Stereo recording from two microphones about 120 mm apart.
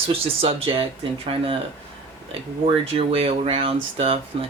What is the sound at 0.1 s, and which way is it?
Speech, 50° right (ahead or behind).